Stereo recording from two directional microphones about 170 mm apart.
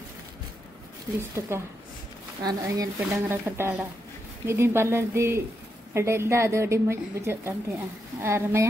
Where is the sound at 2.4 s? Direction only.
20° right (ahead or behind).